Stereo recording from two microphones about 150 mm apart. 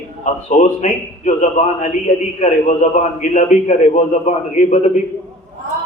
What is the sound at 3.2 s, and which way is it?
A man's voice, 50° left (ahead or behind).